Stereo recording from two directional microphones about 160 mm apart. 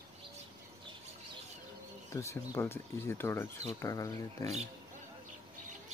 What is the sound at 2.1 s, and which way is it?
Speech, 20° left (ahead or behind).